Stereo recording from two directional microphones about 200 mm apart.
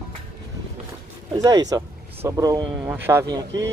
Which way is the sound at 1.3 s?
15° right (ahead or behind).